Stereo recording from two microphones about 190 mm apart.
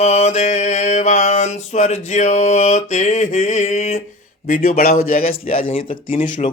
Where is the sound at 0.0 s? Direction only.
35° left (ahead or behind).